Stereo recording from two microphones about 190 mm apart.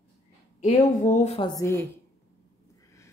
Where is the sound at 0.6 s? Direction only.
40° left (ahead or behind).